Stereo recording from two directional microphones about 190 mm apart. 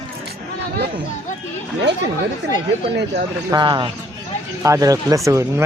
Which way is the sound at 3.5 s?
25° right (ahead or behind).